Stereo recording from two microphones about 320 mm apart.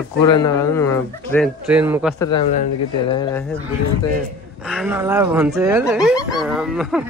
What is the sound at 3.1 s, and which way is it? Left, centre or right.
Speech, centre.